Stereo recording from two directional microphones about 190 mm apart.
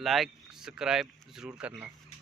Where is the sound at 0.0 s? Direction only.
Centre (ahead or behind).